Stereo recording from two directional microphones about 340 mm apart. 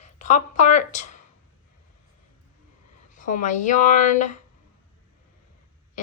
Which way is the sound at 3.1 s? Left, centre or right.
Left.